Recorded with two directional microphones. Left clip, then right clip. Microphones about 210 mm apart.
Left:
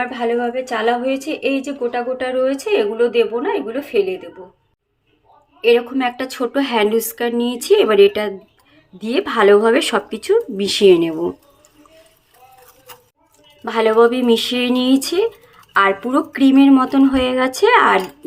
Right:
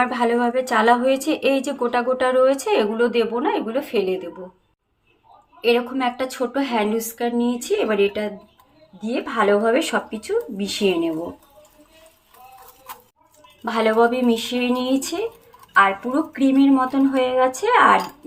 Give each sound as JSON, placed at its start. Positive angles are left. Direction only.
{"t": 0.0, "sound": "a woman's voice", "side_deg": -10}
{"t": 5.6, "sound": "a woman's voice", "side_deg": 10}
{"t": 13.7, "sound": "a woman's voice", "side_deg": 15}